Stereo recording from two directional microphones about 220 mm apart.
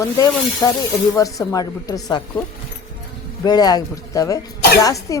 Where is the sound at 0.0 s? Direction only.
15° left (ahead or behind).